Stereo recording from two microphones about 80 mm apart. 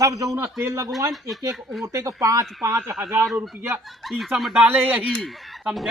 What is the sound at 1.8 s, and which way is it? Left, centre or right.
A man's voice, right.